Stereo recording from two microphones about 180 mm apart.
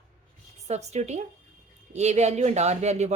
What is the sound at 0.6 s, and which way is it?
Speech, 40° right (ahead or behind).